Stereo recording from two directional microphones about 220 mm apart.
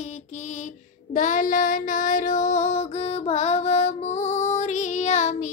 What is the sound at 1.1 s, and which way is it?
Female singing, 35° left (ahead or behind).